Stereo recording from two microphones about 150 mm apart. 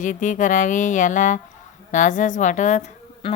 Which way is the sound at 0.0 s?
60° left (ahead or behind).